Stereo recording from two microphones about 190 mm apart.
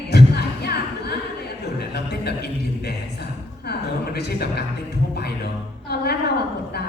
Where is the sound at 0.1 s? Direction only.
55° left (ahead or behind).